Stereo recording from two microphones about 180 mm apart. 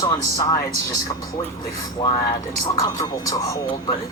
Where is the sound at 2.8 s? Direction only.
20° left (ahead or behind).